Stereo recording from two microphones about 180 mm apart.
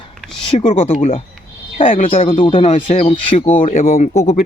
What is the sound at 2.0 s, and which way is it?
Speech, 30° left (ahead or behind).